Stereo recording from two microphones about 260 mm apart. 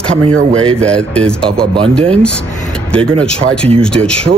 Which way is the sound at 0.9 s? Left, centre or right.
Centre.